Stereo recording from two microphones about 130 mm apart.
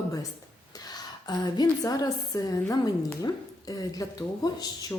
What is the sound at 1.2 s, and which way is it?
Speech, 35° left (ahead or behind).